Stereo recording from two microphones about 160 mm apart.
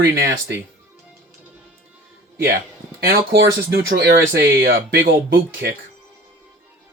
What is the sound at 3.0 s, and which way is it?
Speech, 70° right (ahead or behind).